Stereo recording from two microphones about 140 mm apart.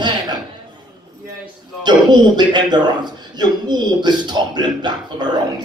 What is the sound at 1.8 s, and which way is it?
A man's voice, 30° right (ahead or behind).